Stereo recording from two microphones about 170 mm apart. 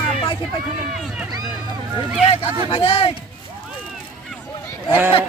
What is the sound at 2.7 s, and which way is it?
Speech, 30° left (ahead or behind).